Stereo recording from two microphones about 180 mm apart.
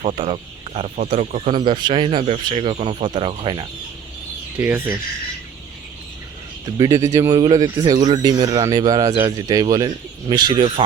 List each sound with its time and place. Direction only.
0.0 s speech: 30° right (ahead or behind)
1.5 s speech: 25° right (ahead or behind)
4.6 s speech: 10° right (ahead or behind)
6.7 s speech: 20° right (ahead or behind)